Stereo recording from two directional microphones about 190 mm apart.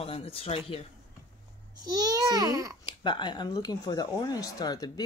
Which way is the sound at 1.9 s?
20° right (ahead or behind).